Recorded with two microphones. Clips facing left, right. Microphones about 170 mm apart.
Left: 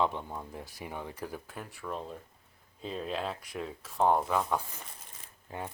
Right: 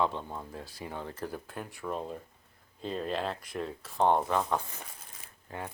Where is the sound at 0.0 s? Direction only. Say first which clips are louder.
Even; 15° left (ahead or behind); by 4.5 s 5° right (ahead or behind).